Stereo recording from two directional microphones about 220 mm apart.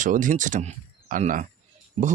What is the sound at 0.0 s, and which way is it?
Speech, 35° right (ahead or behind).